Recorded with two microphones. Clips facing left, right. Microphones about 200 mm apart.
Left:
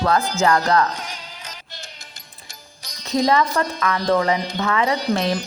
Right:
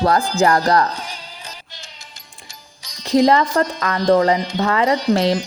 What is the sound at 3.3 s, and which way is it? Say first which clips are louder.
Speech: right 3 dB; 35° right (ahead or behind).